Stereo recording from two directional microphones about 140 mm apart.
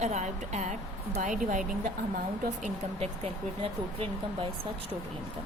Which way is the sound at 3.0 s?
45° right (ahead or behind).